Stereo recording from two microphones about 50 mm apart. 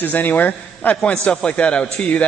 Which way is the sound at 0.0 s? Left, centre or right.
Left.